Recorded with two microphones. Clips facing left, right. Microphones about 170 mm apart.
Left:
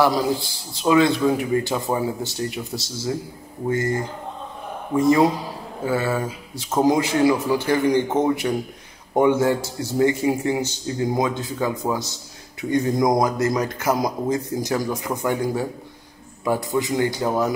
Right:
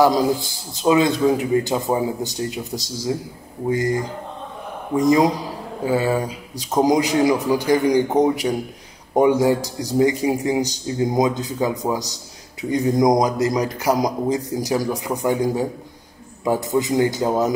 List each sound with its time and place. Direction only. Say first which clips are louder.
0.8 s a man's voice: right 1 dB; 20° right (ahead or behind)